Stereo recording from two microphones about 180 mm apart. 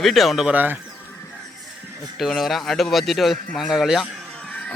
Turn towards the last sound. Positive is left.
turn(degrees=-5)  # may be behind; listen again after turning